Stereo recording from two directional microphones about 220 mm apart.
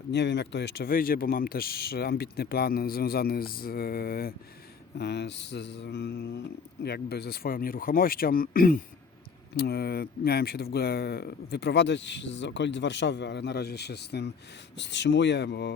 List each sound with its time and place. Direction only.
0.1 s speech: 50° left (ahead or behind)